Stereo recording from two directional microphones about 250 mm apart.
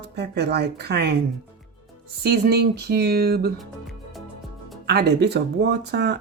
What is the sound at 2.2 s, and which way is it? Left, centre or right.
Speech, right.